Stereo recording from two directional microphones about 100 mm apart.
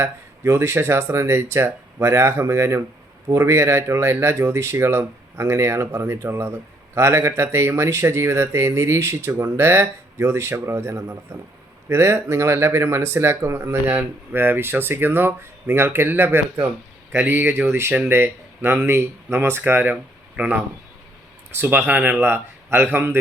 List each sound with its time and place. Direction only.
0.0 s speech: 25° right (ahead or behind)